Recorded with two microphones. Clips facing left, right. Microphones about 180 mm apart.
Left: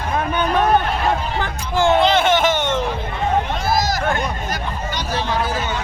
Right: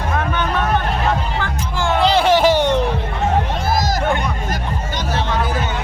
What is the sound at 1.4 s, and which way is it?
Music, 20° left (ahead or behind).